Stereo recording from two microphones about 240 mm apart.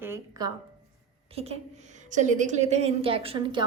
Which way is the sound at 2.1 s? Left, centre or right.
Right.